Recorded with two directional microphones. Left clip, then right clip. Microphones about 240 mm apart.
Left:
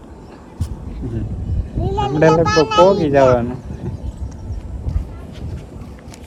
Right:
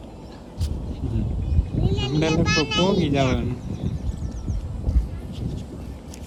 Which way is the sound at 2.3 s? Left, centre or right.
Left.